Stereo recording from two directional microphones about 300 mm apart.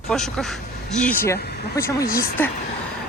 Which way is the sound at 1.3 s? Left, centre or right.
Left.